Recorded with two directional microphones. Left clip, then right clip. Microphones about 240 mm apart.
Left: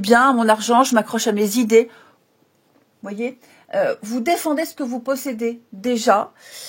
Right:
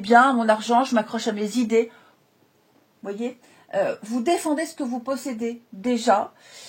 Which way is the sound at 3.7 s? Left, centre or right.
Left.